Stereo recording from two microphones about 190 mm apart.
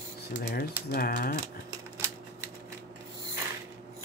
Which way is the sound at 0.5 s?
50° left (ahead or behind).